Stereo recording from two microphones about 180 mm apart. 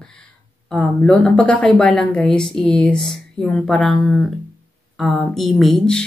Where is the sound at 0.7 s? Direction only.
5° left (ahead or behind).